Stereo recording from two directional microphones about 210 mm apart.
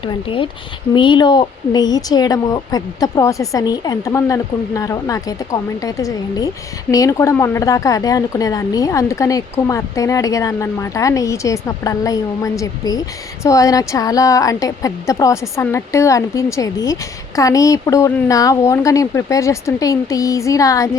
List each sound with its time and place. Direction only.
0.0 s a woman's voice: 25° left (ahead or behind)